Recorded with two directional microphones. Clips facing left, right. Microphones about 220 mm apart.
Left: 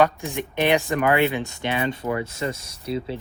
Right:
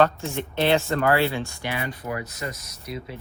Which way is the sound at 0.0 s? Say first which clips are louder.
Even; 15° left (ahead or behind).